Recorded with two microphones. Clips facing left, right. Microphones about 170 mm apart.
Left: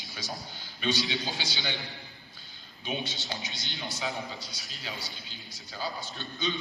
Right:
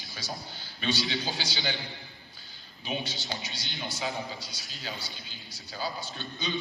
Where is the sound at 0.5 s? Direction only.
20° left (ahead or behind).